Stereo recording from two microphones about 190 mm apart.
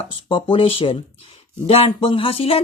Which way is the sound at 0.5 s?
30° left (ahead or behind).